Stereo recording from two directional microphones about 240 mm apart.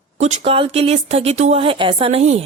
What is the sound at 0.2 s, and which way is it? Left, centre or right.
A woman's voice, right.